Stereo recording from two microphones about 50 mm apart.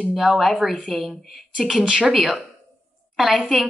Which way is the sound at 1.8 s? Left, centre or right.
Centre.